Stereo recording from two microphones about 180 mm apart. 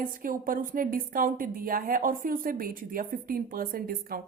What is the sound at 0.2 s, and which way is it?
A woman's voice, 50° right (ahead or behind).